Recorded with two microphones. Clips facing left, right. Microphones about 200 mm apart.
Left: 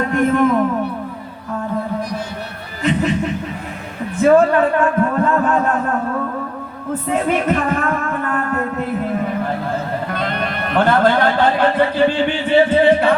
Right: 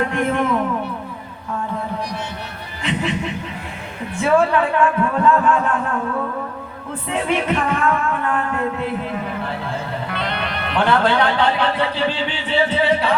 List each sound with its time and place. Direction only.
0.1 s music: 40° left (ahead or behind)
2.8 s music: 40° left (ahead or behind)
4.2 s speech: 40° left (ahead or behind)
7.1 s music: 45° left (ahead or behind)
10.1 s speech: 45° left (ahead or behind)